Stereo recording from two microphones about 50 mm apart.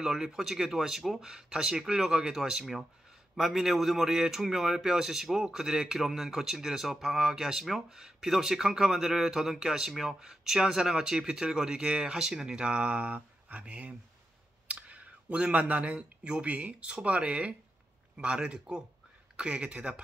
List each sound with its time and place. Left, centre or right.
0.0 s a man's voice: centre
1.2 s a man's voice: centre